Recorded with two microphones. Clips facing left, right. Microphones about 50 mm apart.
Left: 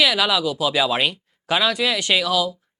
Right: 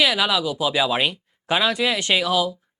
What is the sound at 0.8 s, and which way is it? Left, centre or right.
Speech, centre.